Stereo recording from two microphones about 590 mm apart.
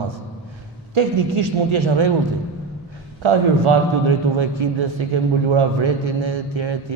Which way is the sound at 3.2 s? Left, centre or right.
Right.